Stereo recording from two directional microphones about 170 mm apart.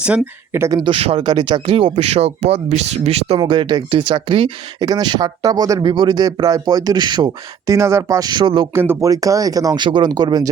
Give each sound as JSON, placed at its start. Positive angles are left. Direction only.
{"t": 0.0, "sound": "speech", "side_deg": -10}
{"t": 0.8, "sound": "speech", "side_deg": -30}
{"t": 8.7, "sound": "speech", "side_deg": -15}